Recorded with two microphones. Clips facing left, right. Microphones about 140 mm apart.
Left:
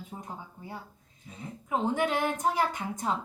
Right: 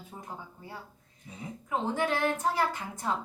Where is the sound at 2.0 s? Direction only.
15° left (ahead or behind).